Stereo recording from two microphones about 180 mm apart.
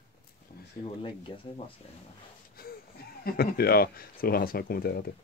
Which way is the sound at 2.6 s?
55° left (ahead or behind).